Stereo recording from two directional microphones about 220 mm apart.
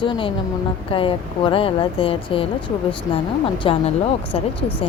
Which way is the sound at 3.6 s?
25° left (ahead or behind).